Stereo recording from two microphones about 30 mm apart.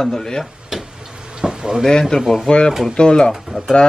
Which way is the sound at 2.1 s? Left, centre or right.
Left.